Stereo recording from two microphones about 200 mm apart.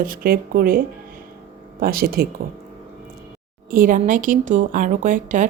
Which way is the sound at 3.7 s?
45° right (ahead or behind).